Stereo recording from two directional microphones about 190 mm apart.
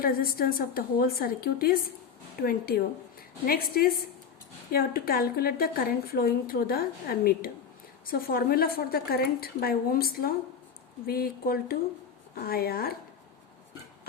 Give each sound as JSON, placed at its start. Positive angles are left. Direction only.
{"t": 0.0, "sound": "a woman's voice", "side_deg": 50}